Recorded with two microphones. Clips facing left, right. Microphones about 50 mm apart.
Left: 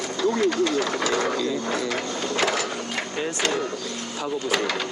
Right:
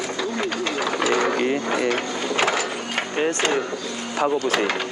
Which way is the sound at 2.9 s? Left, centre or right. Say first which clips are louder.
Right 8 dB; right.